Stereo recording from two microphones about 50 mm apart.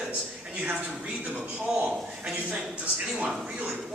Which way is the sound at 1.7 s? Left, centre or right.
Right.